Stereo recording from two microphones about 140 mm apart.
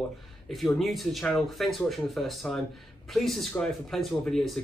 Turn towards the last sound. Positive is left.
turn(degrees=5)  # may be behind; listen again after turning